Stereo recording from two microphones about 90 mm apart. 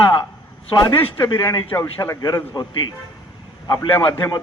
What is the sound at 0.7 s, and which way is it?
Speech, 50° left (ahead or behind).